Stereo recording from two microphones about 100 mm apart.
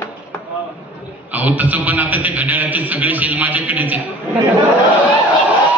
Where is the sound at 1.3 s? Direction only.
15° right (ahead or behind).